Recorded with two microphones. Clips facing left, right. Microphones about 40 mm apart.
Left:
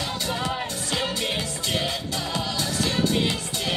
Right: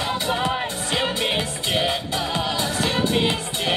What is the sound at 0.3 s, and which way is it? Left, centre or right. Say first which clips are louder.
Music: right 4 dB; right.